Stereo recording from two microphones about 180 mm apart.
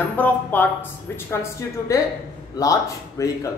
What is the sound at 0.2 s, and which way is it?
Speech, 10° left (ahead or behind).